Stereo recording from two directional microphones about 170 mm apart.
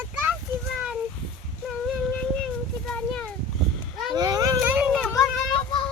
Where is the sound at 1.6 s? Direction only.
Centre (ahead or behind).